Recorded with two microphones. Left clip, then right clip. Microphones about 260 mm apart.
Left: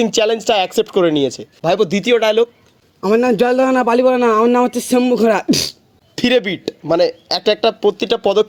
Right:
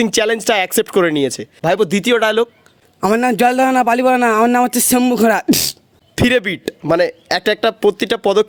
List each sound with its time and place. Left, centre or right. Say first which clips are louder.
0.0 s speech: even; right
3.0 s a man's voice: even; right